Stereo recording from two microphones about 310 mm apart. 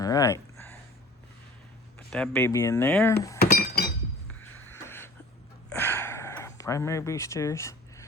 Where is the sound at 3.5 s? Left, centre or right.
Left.